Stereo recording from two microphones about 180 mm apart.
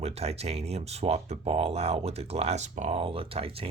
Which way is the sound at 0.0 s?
35° right (ahead or behind).